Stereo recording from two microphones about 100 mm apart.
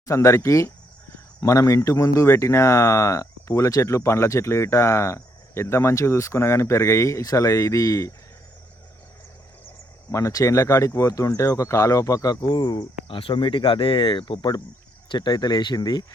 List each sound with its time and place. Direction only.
0.0 s speech: 30° left (ahead or behind)
10.1 s speech: 30° left (ahead or behind)
13.1 s speech: 60° left (ahead or behind); by 16.0 s 40° left (ahead or behind)